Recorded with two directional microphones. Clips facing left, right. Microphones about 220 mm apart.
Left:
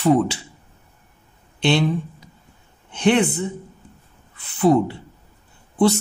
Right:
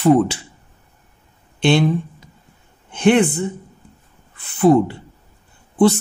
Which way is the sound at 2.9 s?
50° right (ahead or behind).